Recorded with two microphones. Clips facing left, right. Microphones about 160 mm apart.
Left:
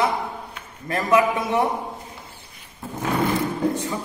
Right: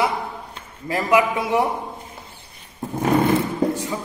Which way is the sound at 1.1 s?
20° right (ahead or behind).